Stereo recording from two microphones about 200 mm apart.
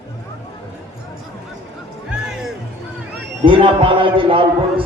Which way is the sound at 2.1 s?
Centre (ahead or behind).